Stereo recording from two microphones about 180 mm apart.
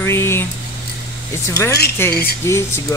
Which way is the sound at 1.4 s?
15° left (ahead or behind).